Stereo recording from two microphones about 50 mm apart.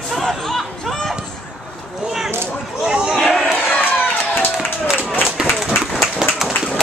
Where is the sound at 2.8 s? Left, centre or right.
Centre.